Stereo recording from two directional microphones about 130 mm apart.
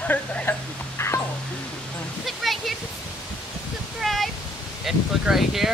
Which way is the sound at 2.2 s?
Centre (ahead or behind).